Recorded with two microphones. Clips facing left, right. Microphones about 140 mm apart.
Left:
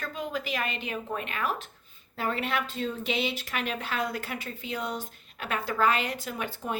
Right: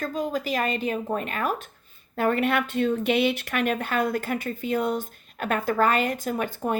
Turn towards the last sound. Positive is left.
turn(degrees=-50)  # may be behind; listen again after turning